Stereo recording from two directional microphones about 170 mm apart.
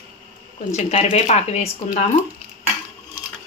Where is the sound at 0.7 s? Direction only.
40° left (ahead or behind).